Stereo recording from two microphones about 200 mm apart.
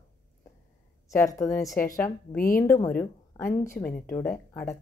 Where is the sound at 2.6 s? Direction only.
15° left (ahead or behind).